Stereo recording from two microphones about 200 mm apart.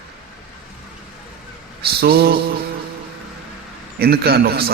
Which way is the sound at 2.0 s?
50° right (ahead or behind).